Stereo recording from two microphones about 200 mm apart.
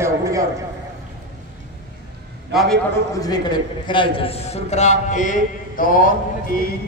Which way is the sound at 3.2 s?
20° left (ahead or behind).